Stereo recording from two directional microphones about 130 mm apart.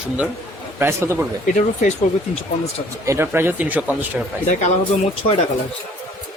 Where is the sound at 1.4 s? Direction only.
75° left (ahead or behind).